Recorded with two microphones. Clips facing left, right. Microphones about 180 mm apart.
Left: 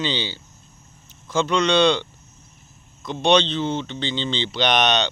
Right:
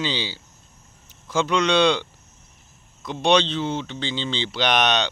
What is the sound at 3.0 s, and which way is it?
Speech, 10° right (ahead or behind).